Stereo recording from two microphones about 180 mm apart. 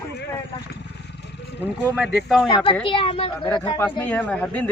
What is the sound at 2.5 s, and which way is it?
Speech, 25° left (ahead or behind).